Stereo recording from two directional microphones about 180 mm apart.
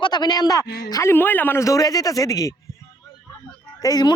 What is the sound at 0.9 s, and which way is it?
Speech, 15° left (ahead or behind).